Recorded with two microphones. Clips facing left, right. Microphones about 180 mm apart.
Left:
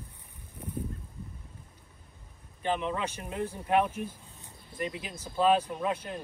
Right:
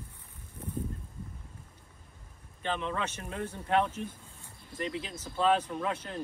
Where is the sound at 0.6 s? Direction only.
20° left (ahead or behind).